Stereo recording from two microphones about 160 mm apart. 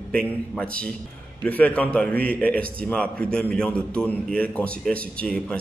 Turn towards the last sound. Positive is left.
turn(degrees=5)  # may be behind; listen again after turning